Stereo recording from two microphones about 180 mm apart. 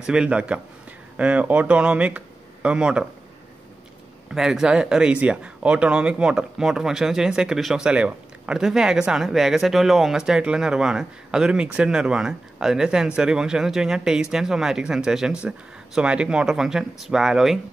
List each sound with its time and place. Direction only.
0.0 s speech: 5° right (ahead or behind)
4.3 s speech: 5° right (ahead or behind)